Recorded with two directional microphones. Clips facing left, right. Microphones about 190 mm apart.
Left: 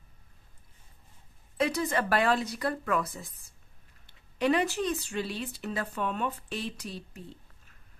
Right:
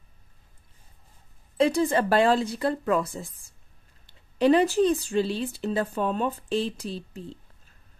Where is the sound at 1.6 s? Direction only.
30° right (ahead or behind).